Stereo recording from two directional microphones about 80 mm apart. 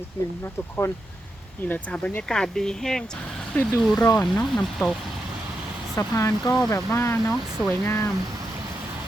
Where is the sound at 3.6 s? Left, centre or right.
Left.